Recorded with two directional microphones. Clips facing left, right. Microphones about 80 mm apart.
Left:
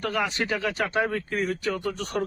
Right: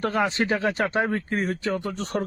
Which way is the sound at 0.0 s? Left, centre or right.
Right.